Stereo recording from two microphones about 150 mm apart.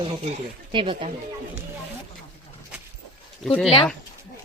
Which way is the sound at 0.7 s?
35° right (ahead or behind).